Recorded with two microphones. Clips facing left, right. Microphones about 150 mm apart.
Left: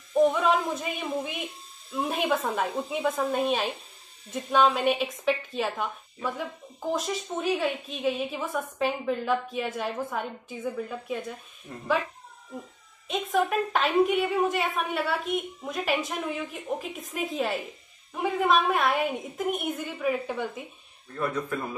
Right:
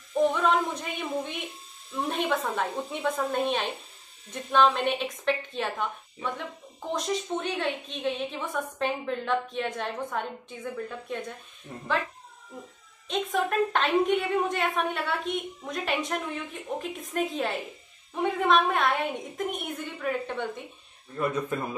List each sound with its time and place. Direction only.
0.3 s a woman's voice: 5° left (ahead or behind)
11.7 s speech: 5° right (ahead or behind)
13.1 s a woman's voice: 5° left (ahead or behind)
21.5 s speech: 20° right (ahead or behind)